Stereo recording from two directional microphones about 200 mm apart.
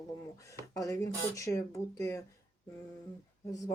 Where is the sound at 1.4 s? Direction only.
15° left (ahead or behind).